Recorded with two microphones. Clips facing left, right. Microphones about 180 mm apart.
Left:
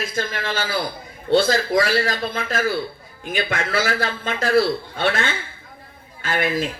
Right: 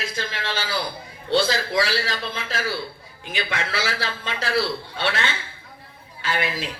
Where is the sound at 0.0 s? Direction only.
50° left (ahead or behind).